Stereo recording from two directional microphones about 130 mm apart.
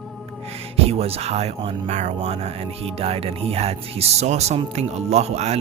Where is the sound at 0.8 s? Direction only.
50° right (ahead or behind).